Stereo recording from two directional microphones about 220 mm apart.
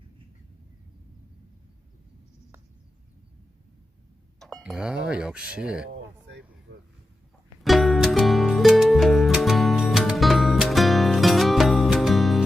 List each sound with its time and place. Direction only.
4.4 s speech: centre (ahead or behind)
5.9 s vehicle: 50° right (ahead or behind)
6.7 s a sound: 50° right (ahead or behind)
7.6 s music: centre (ahead or behind)